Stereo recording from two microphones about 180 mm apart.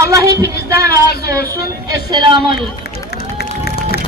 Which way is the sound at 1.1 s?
60° left (ahead or behind).